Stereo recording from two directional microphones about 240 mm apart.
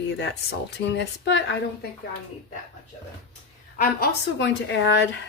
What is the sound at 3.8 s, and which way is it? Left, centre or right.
Speech, left.